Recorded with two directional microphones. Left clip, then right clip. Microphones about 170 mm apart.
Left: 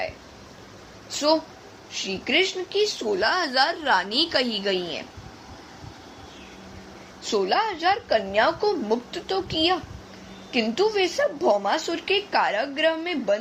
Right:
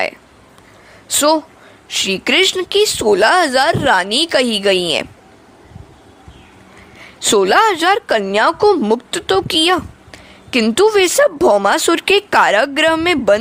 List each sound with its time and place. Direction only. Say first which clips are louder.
1.9 s speech: right 10 dB; 65° right (ahead or behind)
7.3 s speech: right 12 dB; 60° right (ahead or behind)